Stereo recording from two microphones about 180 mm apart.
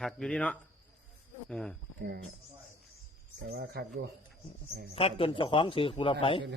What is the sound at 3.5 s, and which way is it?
Speech, 65° right (ahead or behind).